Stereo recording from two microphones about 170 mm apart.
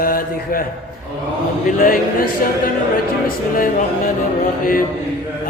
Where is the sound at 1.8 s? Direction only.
55° left (ahead or behind).